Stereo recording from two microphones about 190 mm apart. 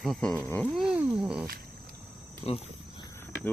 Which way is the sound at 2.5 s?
30° left (ahead or behind).